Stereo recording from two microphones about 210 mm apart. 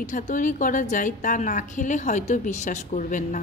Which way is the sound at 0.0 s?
40° left (ahead or behind).